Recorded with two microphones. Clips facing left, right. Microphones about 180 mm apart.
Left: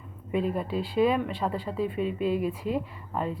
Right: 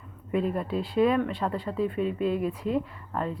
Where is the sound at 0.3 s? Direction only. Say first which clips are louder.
Right 1 dB; centre (ahead or behind).